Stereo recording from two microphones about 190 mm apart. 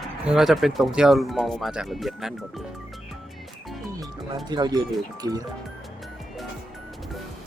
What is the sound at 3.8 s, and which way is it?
Music, 15° right (ahead or behind).